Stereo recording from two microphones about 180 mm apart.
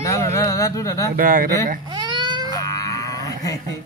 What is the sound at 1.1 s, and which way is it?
Speech, 50° right (ahead or behind).